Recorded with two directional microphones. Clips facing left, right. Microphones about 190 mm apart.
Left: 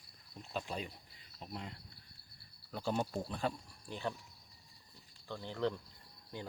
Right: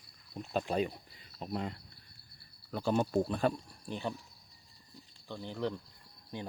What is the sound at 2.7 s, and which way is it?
Speech, 70° right (ahead or behind).